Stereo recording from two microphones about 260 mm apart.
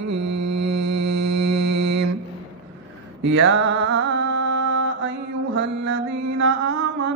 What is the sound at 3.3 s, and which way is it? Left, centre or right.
Mantra, right.